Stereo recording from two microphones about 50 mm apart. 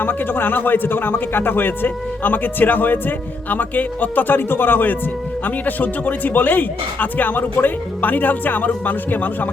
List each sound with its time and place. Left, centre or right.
0.0 s a man's voice: left